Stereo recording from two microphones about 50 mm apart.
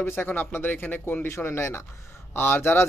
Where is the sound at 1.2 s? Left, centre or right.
Left.